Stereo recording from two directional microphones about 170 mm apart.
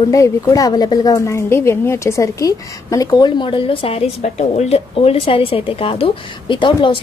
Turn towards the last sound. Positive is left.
turn(degrees=30)  # may be behind; listen again after turning